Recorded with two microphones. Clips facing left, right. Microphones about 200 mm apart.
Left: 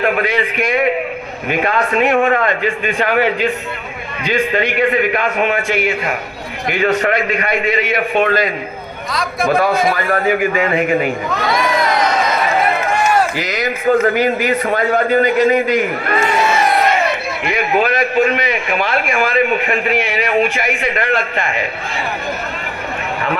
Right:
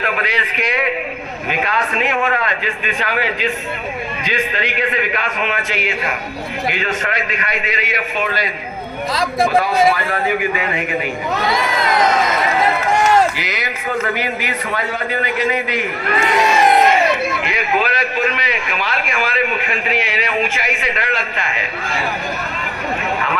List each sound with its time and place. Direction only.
0.0 s a man's voice: 50° left (ahead or behind)
9.9 s a man's voice: 50° left (ahead or behind)
11.4 s crowd: 25° right (ahead or behind)
13.3 s a man's voice: 45° left (ahead or behind)
17.5 s a man's voice: 50° left (ahead or behind)